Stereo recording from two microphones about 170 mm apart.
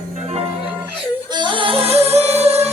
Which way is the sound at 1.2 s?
25° right (ahead or behind).